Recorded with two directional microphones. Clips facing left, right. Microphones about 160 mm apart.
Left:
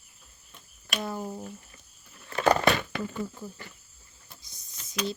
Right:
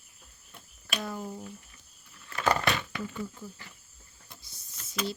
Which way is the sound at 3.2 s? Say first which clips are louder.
Left 3 dB; 50° left (ahead or behind).